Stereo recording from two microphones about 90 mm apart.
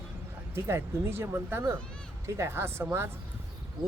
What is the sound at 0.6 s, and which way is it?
Speech, 30° right (ahead or behind).